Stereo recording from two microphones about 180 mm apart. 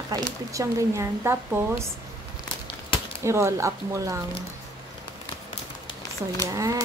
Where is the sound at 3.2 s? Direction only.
15° right (ahead or behind).